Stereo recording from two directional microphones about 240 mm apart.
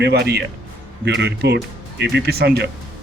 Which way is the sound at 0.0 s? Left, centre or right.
Right.